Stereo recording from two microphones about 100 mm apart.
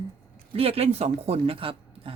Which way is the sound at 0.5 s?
80° right.